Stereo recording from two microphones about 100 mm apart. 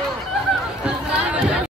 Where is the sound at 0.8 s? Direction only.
10° right (ahead or behind).